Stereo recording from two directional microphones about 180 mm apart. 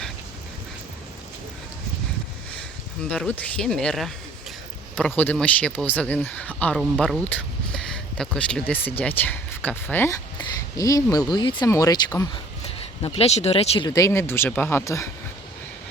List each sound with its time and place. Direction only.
3.1 s speech: 5° left (ahead or behind)